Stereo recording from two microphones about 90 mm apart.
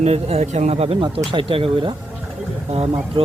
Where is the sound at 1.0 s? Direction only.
70° right (ahead or behind).